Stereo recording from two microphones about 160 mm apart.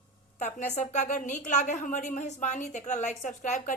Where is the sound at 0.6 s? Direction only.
50° left (ahead or behind).